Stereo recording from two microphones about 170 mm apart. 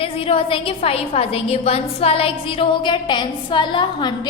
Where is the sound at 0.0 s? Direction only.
35° left (ahead or behind).